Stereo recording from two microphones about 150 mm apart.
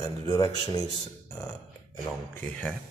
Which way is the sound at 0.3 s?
25° left (ahead or behind).